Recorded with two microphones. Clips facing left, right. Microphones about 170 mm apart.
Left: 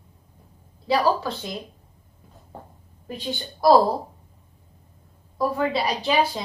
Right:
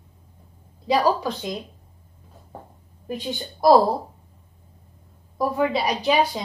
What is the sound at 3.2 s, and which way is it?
Speech, 15° right (ahead or behind).